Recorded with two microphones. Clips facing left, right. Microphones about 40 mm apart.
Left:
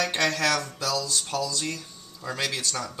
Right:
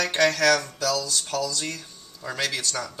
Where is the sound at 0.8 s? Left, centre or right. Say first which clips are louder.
Right 3 dB; centre.